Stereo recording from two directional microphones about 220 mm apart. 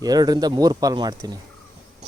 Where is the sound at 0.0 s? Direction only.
15° right (ahead or behind).